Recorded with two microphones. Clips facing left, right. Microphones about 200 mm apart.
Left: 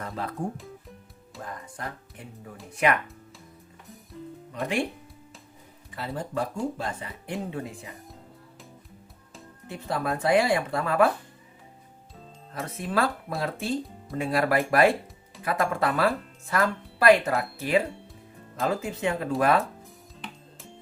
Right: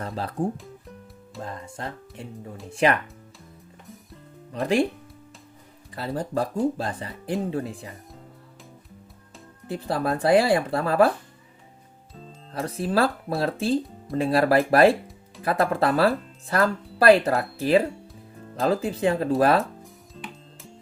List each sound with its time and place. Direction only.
0.2 s speech: 30° right (ahead or behind)
0.5 s music: centre (ahead or behind)
1.4 s speech: 25° right (ahead or behind)
4.5 s speech: 35° right (ahead or behind)
5.9 s speech: 35° right (ahead or behind)
9.6 s speech: 35° right (ahead or behind)
12.5 s speech: 30° right (ahead or behind)